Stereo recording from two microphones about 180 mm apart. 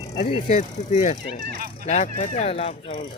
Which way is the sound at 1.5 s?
55° right (ahead or behind).